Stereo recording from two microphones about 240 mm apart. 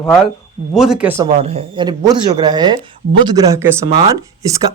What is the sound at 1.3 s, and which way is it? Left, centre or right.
Speech, right.